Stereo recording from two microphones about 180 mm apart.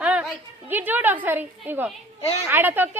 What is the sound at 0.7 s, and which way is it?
A woman's voice, 10° right (ahead or behind).